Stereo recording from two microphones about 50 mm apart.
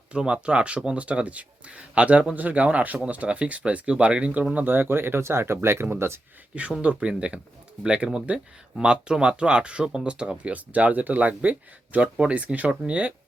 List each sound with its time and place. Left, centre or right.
0.1 s speech: right
4.6 s speech: right
6.5 s speech: centre